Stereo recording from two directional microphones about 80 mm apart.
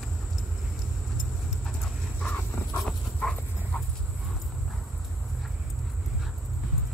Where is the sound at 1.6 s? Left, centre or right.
Centre.